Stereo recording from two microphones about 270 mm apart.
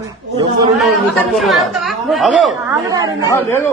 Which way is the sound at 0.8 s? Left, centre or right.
Centre.